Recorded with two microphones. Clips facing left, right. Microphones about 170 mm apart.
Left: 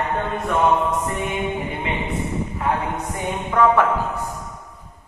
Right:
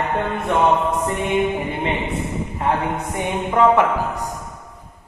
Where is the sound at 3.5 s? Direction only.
15° right (ahead or behind).